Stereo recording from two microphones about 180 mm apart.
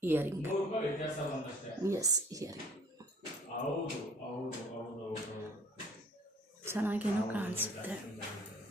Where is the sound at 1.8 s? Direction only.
20° right (ahead or behind).